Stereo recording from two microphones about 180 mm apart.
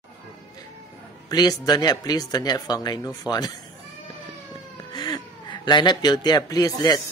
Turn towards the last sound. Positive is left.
turn(degrees=20)  # may be behind; listen again after turning